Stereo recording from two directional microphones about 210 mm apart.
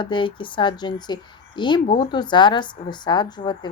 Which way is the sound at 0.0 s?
25° left (ahead or behind).